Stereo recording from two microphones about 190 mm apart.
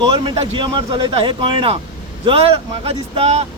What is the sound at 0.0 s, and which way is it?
Speech, 25° right (ahead or behind).